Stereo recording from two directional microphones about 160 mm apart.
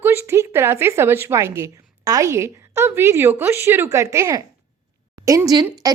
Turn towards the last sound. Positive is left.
turn(degrees=-25)  # may be behind; listen again after turning